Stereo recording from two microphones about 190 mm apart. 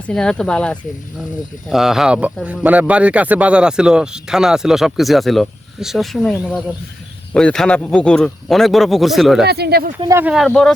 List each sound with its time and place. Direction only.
0.1 s speech: 5° left (ahead or behind)
9.5 s speech: 55° right (ahead or behind)
10.0 s speech: 15° right (ahead or behind)
10.3 s speech: centre (ahead or behind)